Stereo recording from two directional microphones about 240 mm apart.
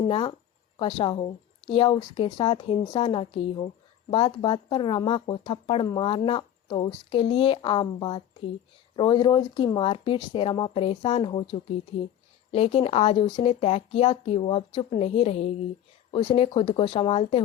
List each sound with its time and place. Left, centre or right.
0.1 s speech: left